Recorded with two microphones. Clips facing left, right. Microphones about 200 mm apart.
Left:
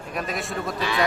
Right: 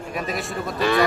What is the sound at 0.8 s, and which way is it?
Speech, 50° right (ahead or behind).